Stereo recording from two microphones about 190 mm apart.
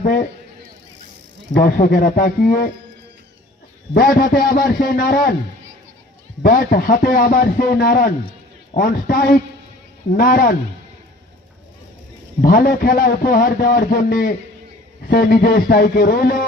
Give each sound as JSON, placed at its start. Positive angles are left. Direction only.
{"t": 0.0, "sound": "a man's voice", "side_deg": 40}
{"t": 1.5, "sound": "a man's voice", "side_deg": 45}
{"t": 3.9, "sound": "a man's voice", "side_deg": 50}
{"t": 6.4, "sound": "a man's voice", "side_deg": 50}
{"t": 12.4, "sound": "a man's voice", "side_deg": 50}